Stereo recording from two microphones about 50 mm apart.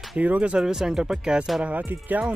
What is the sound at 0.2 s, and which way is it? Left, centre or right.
Speech, right.